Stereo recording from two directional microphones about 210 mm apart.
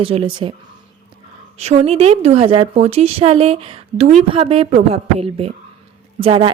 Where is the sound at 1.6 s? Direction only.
30° right (ahead or behind).